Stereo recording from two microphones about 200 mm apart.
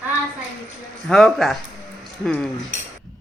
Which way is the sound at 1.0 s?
Centre (ahead or behind).